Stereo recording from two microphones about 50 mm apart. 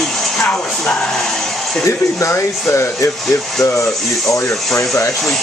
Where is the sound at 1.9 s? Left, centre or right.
Left.